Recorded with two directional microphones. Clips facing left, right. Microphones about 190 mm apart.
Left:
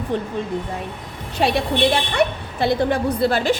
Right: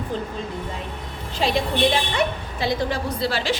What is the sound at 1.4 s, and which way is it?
A woman's voice, 55° left (ahead or behind).